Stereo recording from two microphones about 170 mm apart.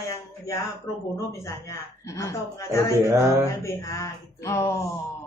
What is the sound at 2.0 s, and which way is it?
Speech, 20° left (ahead or behind).